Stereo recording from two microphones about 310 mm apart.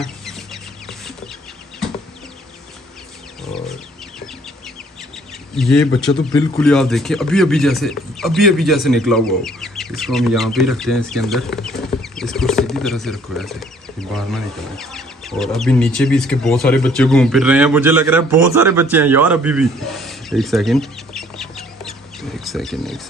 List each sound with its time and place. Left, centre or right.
0.0 s chicken: centre
3.4 s chicken: centre
5.5 s speech: centre
22.2 s a sound: centre